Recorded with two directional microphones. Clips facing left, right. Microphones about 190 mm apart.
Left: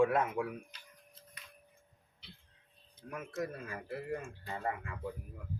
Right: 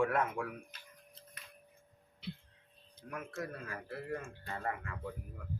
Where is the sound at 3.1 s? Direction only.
20° left (ahead or behind).